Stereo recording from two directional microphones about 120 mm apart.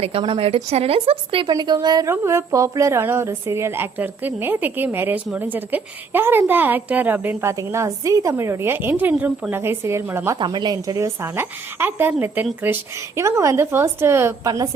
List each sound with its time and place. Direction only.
0.0 s a woman's voice: 50° right (ahead or behind); by 2.0 s 35° right (ahead or behind)
2.0 s a woman's voice: 25° right (ahead or behind)
7.5 s a woman's voice: 25° right (ahead or behind)
10.3 s a woman's voice: 40° right (ahead or behind)